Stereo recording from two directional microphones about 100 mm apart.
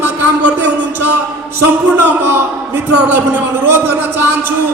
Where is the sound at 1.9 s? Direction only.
20° right (ahead or behind).